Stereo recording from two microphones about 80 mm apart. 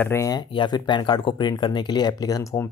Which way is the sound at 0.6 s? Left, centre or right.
Left.